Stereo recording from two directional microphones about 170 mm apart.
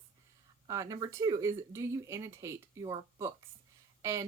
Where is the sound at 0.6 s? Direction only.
20° right (ahead or behind).